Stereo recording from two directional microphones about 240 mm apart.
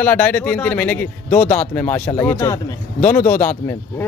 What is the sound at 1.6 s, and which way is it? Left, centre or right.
Speech, centre.